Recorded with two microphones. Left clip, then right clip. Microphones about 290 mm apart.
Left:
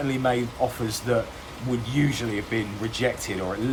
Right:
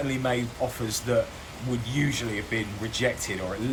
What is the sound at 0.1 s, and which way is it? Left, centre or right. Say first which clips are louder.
Speech: left 3 dB; centre.